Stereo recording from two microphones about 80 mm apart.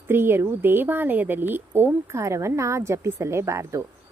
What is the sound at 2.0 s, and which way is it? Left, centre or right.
Speech, right.